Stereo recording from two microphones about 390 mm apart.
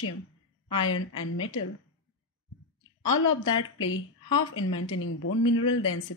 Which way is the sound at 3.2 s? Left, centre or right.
Left.